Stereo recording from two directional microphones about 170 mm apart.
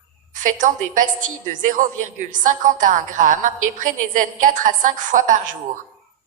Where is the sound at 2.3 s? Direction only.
50° right (ahead or behind).